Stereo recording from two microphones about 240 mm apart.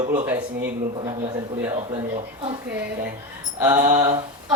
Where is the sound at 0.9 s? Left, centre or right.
Right.